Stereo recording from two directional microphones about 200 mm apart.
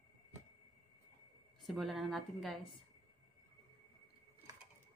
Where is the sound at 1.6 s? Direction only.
Centre (ahead or behind).